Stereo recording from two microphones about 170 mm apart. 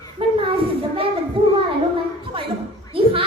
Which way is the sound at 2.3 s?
30° right (ahead or behind).